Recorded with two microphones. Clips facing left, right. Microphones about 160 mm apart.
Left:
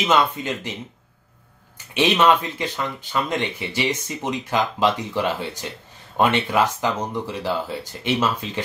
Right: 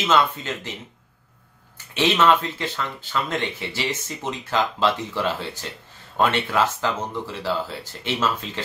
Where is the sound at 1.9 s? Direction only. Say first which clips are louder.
Left 1 dB; 15° left (ahead or behind).